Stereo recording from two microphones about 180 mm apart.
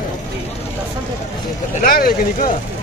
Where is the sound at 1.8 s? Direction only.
50° left (ahead or behind).